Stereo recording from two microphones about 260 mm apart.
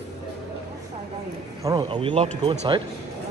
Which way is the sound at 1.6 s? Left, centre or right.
Centre.